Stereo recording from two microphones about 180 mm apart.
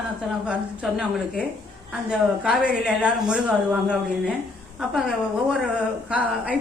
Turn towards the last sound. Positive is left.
turn(degrees=-10)  # may be behind; listen again after turning